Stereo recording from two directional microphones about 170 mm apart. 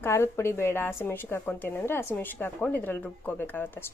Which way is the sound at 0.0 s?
15° left (ahead or behind).